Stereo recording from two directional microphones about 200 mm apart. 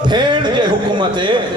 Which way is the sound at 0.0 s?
20° right (ahead or behind).